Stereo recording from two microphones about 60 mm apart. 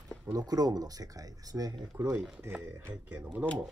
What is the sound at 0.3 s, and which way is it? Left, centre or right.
Speech, right.